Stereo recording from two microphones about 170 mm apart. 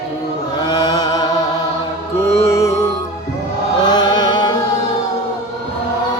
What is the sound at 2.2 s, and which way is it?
Music, 15° left (ahead or behind).